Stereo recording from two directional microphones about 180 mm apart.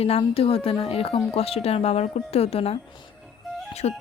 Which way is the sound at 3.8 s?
40° left (ahead or behind).